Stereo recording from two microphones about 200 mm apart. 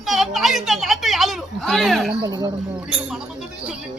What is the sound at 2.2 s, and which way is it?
Speech, 20° right (ahead or behind).